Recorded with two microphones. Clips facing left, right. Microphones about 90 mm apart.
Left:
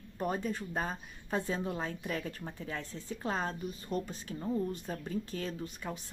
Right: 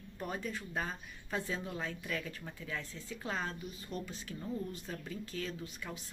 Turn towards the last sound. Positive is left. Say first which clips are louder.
# left 4 dB
turn(degrees=40)  # may be behind; listen again after turning